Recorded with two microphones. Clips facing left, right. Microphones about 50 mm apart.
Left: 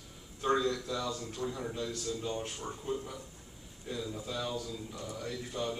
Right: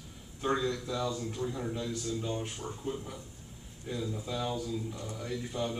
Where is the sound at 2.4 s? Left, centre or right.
Centre.